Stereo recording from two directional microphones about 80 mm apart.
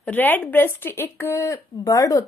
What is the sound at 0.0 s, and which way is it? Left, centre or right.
Speech, left.